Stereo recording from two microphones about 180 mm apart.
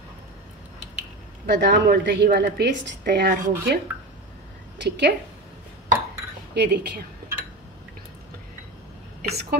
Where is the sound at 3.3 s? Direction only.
55° right (ahead or behind).